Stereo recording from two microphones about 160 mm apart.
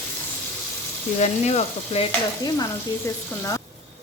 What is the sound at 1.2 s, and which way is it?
Frying, 45° left (ahead or behind).